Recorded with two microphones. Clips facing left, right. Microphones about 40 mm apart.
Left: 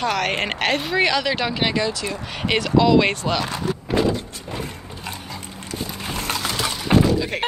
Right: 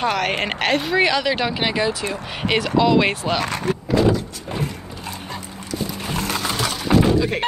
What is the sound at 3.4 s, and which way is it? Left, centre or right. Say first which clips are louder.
Speech: right 2 dB; right.